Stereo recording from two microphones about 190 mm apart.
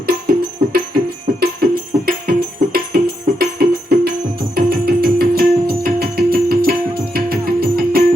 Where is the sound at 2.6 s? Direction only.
50° right (ahead or behind).